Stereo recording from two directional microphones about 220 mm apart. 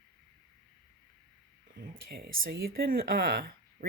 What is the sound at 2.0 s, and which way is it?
Speech, 45° right (ahead or behind).